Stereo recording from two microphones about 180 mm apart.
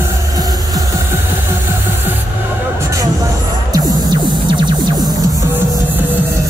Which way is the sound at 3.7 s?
25° right (ahead or behind).